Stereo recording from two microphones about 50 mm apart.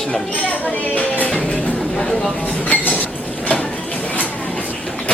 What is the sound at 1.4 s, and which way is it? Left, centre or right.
Music, left.